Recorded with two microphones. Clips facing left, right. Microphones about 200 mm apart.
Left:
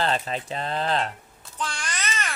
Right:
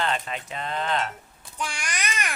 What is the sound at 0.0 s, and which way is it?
Speech, 35° left (ahead or behind).